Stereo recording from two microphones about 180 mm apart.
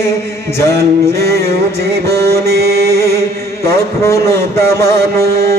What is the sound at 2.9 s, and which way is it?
Chant, 15° left (ahead or behind).